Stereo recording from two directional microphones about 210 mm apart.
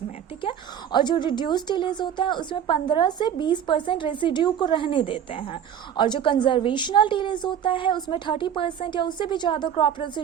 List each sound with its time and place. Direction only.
0.9 s a woman's voice: 20° left (ahead or behind)